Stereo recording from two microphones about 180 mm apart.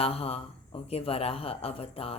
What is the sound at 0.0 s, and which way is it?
Speech, 35° left (ahead or behind).